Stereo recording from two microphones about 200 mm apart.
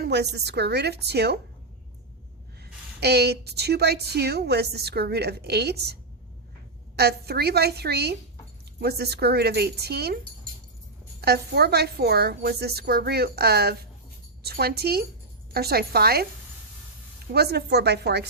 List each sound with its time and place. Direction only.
0.0 s a woman's voice: 55° right (ahead or behind)
3.0 s a woman's voice: 55° right (ahead or behind)
11.2 s a woman's voice: 55° right (ahead or behind)
17.3 s a woman's voice: 55° right (ahead or behind)